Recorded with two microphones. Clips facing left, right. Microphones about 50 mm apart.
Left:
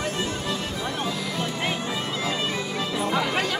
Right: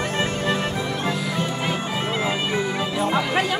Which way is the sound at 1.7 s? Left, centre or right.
Right.